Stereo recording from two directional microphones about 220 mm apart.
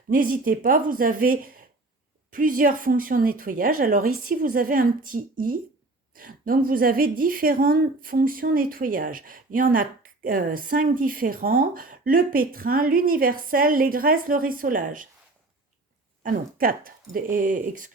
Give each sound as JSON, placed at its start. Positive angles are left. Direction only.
{"t": 0.1, "sound": "speech", "side_deg": -40}
{"t": 16.2, "sound": "speech", "side_deg": -40}